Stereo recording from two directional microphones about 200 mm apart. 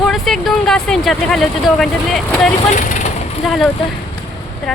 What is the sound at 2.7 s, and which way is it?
Vehicle, 40° left (ahead or behind).